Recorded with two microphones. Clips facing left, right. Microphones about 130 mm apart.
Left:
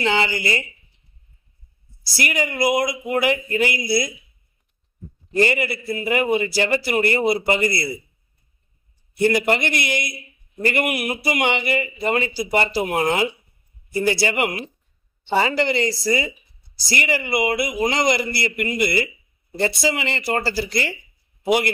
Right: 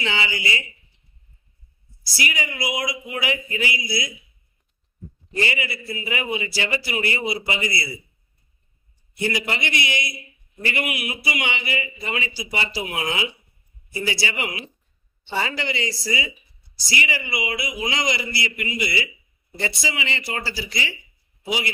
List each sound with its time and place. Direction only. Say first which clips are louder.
0.0 s a man's voice: left 6 dB; 45° left (ahead or behind)
2.1 s a man's voice: left 5 dB; 50° left (ahead or behind)
5.4 s a man's voice: left 6 dB; 50° left (ahead or behind)
9.2 s a man's voice: left 7 dB; 50° left (ahead or behind)